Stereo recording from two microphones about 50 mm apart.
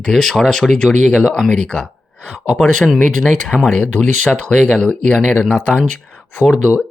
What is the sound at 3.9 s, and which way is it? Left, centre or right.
Speech, left.